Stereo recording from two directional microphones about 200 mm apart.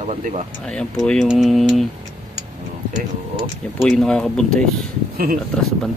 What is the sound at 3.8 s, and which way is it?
Speech, 5° left (ahead or behind).